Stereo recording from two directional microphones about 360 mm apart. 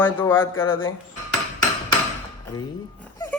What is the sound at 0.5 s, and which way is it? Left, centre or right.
Speech, left.